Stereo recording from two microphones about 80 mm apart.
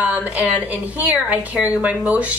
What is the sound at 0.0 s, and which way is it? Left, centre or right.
Speech, right.